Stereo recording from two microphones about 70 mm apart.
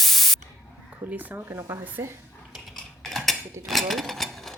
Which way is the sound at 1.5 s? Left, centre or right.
Right.